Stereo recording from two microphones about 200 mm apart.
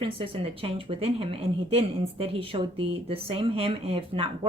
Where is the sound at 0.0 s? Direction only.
25° right (ahead or behind).